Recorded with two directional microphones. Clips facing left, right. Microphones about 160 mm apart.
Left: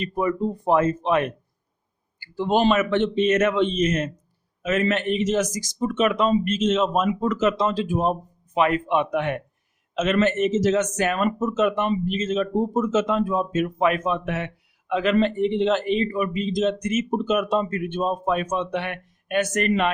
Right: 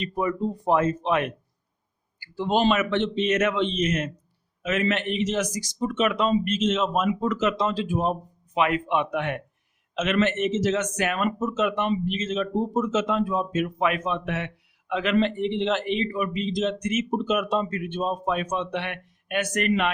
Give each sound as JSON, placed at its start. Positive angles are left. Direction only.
{"t": 0.0, "sound": "speech", "side_deg": 50}